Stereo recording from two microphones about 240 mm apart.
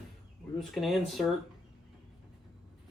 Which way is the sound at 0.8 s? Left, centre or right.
Centre.